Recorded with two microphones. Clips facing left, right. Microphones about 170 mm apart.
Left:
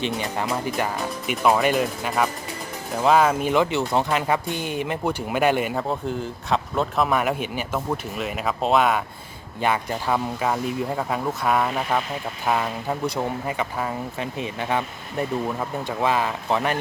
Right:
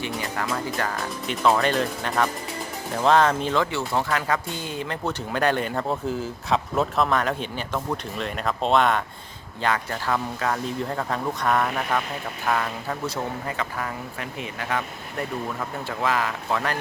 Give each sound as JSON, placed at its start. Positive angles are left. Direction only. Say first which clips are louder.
{"t": 0.0, "sound": "speech", "louder": "left 3 dB", "side_deg": 20}
{"t": 9.6, "sound": "speech", "louder": "left 2 dB", "side_deg": 15}